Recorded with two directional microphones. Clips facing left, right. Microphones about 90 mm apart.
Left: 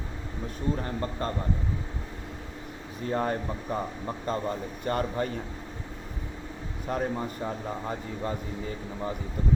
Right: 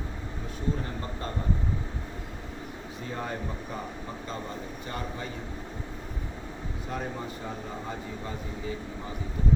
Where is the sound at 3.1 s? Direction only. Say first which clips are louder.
Left 8 dB; 45° left (ahead or behind).